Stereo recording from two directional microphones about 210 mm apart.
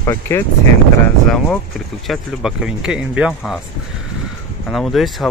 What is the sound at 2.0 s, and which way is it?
Speech, 5° right (ahead or behind).